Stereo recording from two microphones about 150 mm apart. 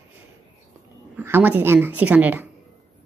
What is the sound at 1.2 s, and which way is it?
Speech, 15° right (ahead or behind).